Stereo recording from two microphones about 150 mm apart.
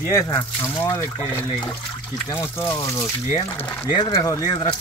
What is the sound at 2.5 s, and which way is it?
Speech, 20° left (ahead or behind).